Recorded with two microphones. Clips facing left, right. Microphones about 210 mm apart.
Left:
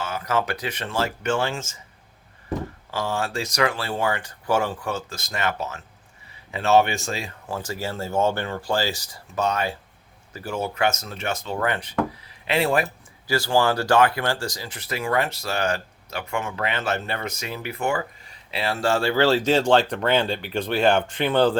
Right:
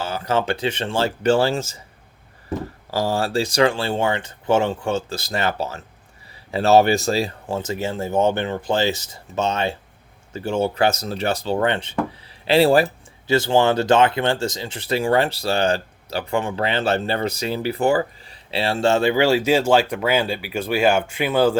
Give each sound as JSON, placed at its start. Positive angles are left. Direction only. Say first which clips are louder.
{"t": 0.0, "sound": "speech", "louder": "right 3 dB", "side_deg": -30}
{"t": 2.9, "sound": "speech", "louder": "right 6 dB", "side_deg": -35}